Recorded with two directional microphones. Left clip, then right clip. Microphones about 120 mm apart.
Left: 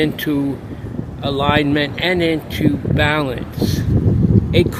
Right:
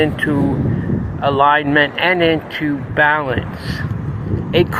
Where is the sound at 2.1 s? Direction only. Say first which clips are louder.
Right 3 dB; 90° left.